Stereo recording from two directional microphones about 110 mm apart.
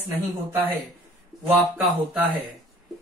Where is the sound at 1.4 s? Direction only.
15° right (ahead or behind).